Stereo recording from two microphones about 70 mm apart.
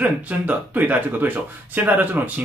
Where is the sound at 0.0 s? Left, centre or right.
Right.